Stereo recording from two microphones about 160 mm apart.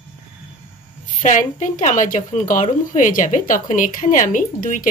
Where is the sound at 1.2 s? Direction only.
55° left (ahead or behind).